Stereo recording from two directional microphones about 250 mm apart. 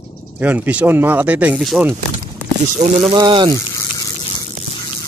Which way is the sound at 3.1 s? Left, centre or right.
Right.